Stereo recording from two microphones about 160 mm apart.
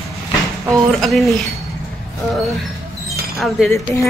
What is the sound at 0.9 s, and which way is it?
Speech, centre (ahead or behind).